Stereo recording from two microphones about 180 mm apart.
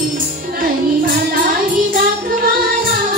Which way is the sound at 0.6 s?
55° right (ahead or behind).